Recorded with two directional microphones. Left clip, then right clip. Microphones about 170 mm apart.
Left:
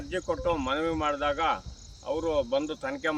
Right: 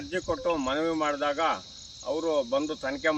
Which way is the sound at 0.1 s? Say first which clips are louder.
Even; 30° left (ahead or behind).